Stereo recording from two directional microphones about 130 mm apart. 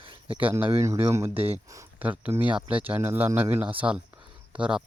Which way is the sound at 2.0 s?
10° right (ahead or behind).